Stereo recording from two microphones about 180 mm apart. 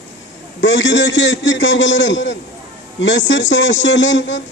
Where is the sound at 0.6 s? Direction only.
90° left.